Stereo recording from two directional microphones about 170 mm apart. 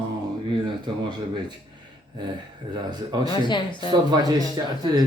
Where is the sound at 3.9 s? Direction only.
25° right (ahead or behind).